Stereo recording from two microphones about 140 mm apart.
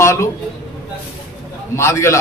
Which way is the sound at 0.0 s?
20° left (ahead or behind).